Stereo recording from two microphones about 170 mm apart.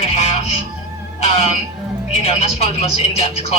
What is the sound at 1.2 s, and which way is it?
A woman's voice, 40° left (ahead or behind).